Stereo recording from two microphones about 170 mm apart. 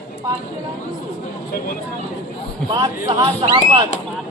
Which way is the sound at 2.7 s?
25° right (ahead or behind).